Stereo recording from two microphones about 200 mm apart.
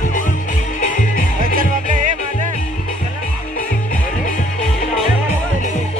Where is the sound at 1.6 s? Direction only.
40° right (ahead or behind).